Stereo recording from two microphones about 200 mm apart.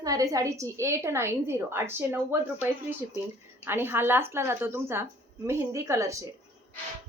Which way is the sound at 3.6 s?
10° right (ahead or behind).